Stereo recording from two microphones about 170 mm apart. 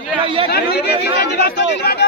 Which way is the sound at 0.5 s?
75° left (ahead or behind).